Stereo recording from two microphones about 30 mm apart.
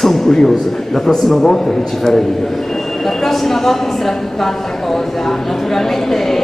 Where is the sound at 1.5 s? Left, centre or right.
Centre.